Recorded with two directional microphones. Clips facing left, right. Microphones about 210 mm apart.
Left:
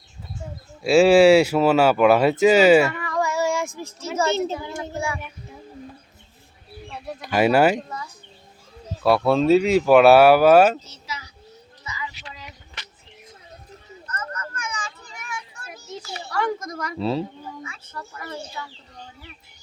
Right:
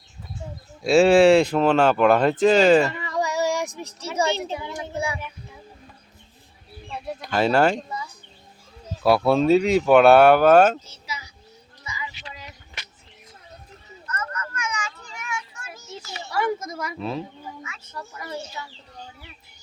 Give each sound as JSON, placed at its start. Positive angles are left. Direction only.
{"t": 0.8, "sound": "speech", "side_deg": 0}
{"t": 3.0, "sound": "child singing", "side_deg": -20}
{"t": 4.9, "sound": "a child's voice", "side_deg": -20}
{"t": 7.3, "sound": "speech", "side_deg": 10}
{"t": 9.0, "sound": "speech", "side_deg": 0}
{"t": 11.0, "sound": "child singing", "side_deg": -10}
{"t": 12.3, "sound": "a sound", "side_deg": -10}
{"t": 14.1, "sound": "a sound", "side_deg": 30}
{"t": 16.3, "sound": "speech", "side_deg": -5}
{"t": 17.0, "sound": "speech", "side_deg": 30}
{"t": 17.9, "sound": "a child's voice", "side_deg": -10}